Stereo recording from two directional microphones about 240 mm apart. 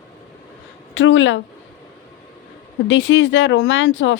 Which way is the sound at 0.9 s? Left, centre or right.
Left.